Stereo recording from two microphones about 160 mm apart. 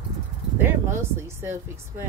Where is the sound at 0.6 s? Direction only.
15° right (ahead or behind).